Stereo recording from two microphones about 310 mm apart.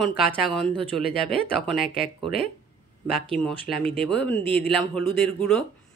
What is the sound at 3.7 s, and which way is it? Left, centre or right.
Speech, centre.